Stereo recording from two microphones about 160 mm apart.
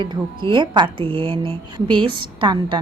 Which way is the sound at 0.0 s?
30° right (ahead or behind).